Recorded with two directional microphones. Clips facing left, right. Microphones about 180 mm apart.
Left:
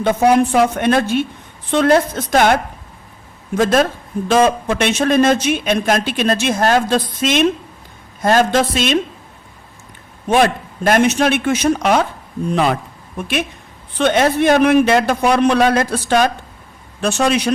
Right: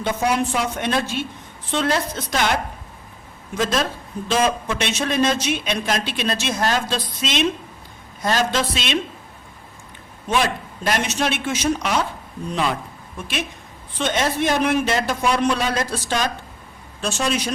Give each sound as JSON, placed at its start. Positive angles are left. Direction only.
{"t": 0.0, "sound": "speech", "side_deg": 55}
{"t": 10.2, "sound": "speech", "side_deg": 55}